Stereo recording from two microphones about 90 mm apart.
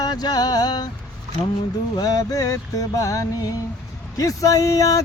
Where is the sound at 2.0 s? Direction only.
45° left (ahead or behind).